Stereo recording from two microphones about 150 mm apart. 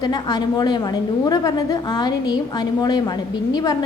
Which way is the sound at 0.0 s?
25° left (ahead or behind).